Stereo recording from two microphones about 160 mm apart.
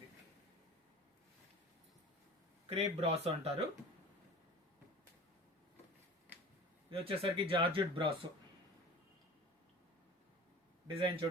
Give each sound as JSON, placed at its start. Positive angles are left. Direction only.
{"t": 2.6, "sound": "speech", "side_deg": -40}
{"t": 7.0, "sound": "speech", "side_deg": -35}
{"t": 10.8, "sound": "speech", "side_deg": -35}